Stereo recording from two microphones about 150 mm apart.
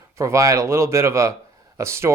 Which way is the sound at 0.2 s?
20° right (ahead or behind).